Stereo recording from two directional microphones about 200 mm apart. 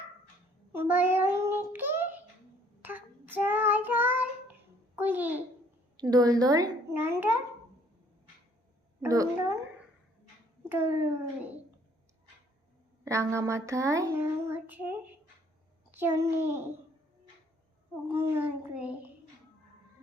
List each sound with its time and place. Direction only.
0.7 s a child's voice: 10° right (ahead or behind)
2.8 s child singing: 10° right (ahead or behind)
4.9 s a child's voice: 10° right (ahead or behind)
9.0 s a child's voice: 15° right (ahead or behind)
10.7 s a child's voice: 10° right (ahead or behind)
13.1 s a child's voice: 15° right (ahead or behind)
16.0 s a child's voice: 10° right (ahead or behind)
18.1 s a child's voice: 10° right (ahead or behind)